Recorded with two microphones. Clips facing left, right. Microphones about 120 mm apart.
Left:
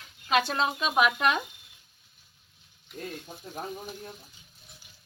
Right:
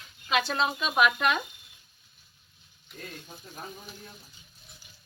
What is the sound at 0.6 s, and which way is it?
Speech, 25° left (ahead or behind).